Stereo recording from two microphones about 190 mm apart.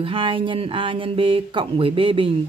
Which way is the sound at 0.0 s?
25° right (ahead or behind).